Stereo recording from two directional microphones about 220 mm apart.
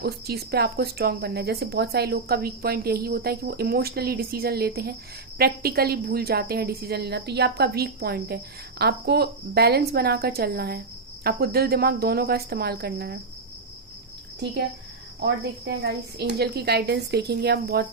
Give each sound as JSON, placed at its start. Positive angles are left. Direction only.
{"t": 0.0, "sound": "speech", "side_deg": -45}
{"t": 15.2, "sound": "speech", "side_deg": -50}